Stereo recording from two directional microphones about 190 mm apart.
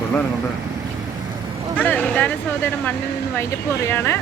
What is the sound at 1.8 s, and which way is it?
Vehicle, 10° left (ahead or behind).